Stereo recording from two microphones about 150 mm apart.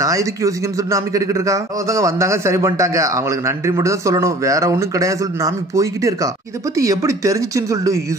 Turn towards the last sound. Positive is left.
turn(degrees=-20)  # may be behind; listen again after turning